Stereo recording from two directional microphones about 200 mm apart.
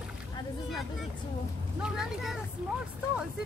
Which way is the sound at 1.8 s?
Centre (ahead or behind).